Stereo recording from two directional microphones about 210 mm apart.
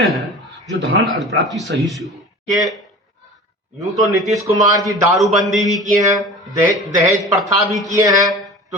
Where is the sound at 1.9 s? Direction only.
Centre (ahead or behind).